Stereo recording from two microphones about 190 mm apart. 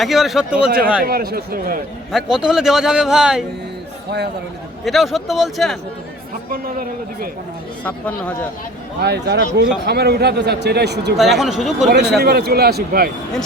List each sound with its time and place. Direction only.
0.0 s a man's voice: centre (ahead or behind)
1.0 s a man's voice: 50° right (ahead or behind)
2.1 s a man's voice: 5° right (ahead or behind)
4.9 s a man's voice: centre (ahead or behind)
6.5 s a man's voice: 50° right (ahead or behind)
7.9 s speech: 5° left (ahead or behind)
9.0 s a man's voice: 60° right (ahead or behind)
11.2 s a man's voice: centre (ahead or behind)
11.9 s a man's voice: 60° right (ahead or behind)